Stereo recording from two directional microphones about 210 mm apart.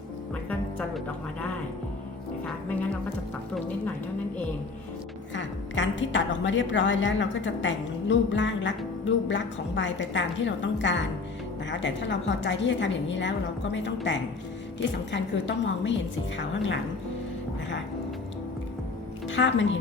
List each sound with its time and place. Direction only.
0.8 s speech: 10° left (ahead or behind)
5.3 s a woman's voice: 60° left (ahead or behind)
19.3 s a woman's voice: 60° left (ahead or behind)